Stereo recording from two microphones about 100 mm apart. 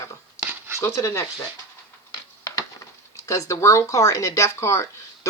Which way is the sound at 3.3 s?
30° left (ahead or behind).